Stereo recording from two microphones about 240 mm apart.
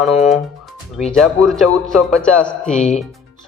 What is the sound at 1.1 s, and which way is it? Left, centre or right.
Speech, centre.